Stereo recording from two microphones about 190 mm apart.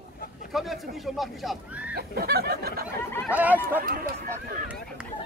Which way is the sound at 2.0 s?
55° right (ahead or behind).